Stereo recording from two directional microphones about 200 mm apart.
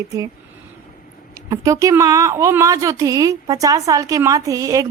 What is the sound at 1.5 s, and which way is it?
A woman's voice, 15° right (ahead or behind).